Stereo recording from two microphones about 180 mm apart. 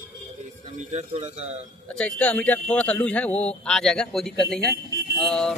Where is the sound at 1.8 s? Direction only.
5° left (ahead or behind).